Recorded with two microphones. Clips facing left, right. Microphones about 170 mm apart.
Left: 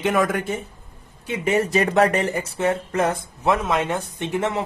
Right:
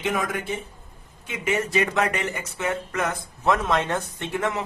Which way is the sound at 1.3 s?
35° left (ahead or behind).